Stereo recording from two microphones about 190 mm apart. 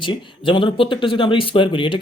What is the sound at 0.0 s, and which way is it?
Speech, 25° left (ahead or behind).